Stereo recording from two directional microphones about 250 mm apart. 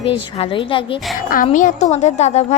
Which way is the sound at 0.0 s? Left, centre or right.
Left.